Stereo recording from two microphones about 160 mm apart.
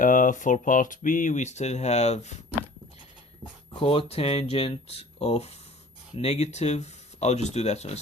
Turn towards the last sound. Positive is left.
turn(degrees=45)  # may be behind; listen again after turning